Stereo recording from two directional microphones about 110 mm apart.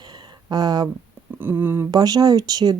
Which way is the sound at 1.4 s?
20° right (ahead or behind).